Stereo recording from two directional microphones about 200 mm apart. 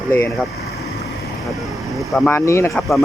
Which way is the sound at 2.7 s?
Centre (ahead or behind).